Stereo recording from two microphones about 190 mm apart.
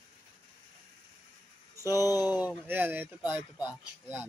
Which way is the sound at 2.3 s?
10° right (ahead or behind).